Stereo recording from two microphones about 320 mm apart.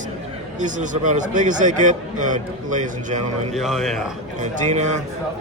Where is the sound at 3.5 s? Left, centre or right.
Centre.